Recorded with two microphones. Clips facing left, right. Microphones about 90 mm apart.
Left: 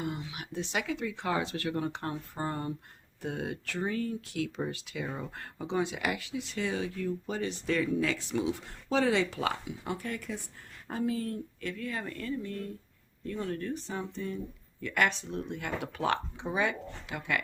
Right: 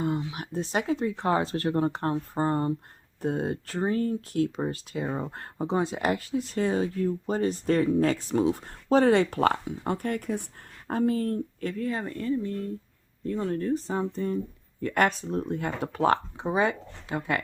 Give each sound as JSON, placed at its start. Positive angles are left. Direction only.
{"t": 0.0, "sound": "speech", "side_deg": -30}